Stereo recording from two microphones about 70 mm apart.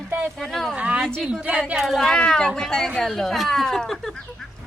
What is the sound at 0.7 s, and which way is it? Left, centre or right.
Speech, centre.